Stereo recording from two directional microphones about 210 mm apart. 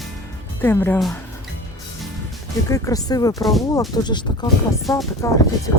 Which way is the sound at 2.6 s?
15° left (ahead or behind).